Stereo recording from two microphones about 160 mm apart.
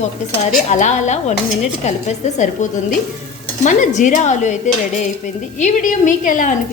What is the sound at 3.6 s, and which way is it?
Speech, 50° left (ahead or behind).